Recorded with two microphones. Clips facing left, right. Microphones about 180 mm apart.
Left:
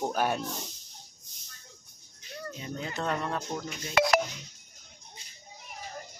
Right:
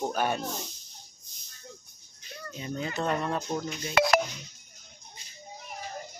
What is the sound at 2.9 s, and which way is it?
Speech, 10° right (ahead or behind).